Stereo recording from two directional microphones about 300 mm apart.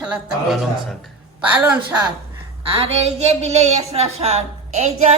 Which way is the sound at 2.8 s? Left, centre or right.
Right.